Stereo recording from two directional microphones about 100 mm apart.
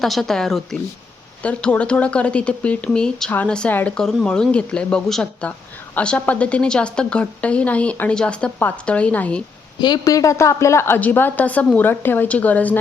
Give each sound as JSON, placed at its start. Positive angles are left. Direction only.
{"t": 0.0, "sound": "a woman's voice", "side_deg": 0}
{"t": 9.8, "sound": "a woman's voice", "side_deg": 40}